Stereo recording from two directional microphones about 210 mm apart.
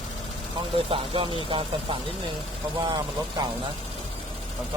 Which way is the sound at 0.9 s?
25° right (ahead or behind).